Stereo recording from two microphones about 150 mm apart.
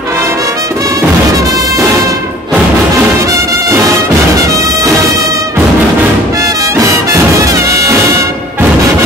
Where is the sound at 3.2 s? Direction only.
20° right (ahead or behind).